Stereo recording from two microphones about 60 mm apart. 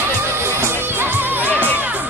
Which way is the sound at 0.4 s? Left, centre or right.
Right.